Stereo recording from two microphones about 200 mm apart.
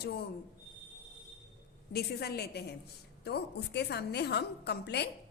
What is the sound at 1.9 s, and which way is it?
A woman's voice, 50° left (ahead or behind).